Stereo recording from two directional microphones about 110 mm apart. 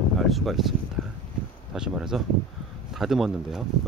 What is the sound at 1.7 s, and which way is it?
Speech, 5° right (ahead or behind).